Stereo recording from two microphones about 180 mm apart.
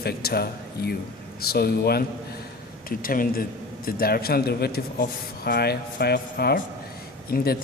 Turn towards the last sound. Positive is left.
turn(degrees=60)  # may be behind; listen again after turning